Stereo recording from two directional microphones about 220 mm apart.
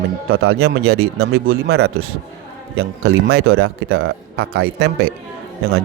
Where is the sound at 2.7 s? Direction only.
75° right (ahead or behind).